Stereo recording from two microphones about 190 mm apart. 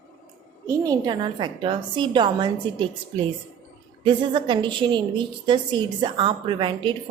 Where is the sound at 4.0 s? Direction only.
25° right (ahead or behind).